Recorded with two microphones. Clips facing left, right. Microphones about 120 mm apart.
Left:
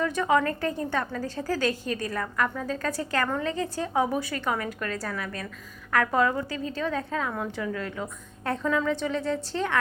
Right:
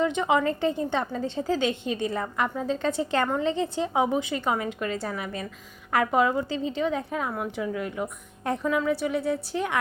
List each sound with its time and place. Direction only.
0.0 s a woman's voice: 20° right (ahead or behind)